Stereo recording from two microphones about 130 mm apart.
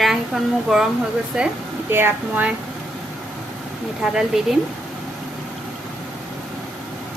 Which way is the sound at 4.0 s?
5° right (ahead or behind).